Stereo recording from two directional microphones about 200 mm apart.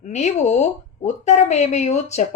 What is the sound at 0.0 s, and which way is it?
Speech, 35° left (ahead or behind).